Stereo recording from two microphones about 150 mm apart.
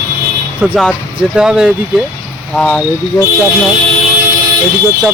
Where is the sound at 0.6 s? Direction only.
5° right (ahead or behind).